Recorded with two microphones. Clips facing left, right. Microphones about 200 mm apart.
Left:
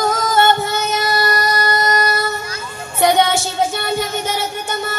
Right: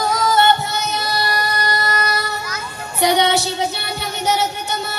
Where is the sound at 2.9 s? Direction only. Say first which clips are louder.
Left 2 dB; 50° left (ahead or behind).